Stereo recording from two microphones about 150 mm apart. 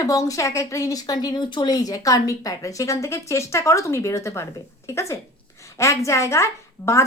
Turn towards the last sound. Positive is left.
turn(degrees=20)  # may be behind; listen again after turning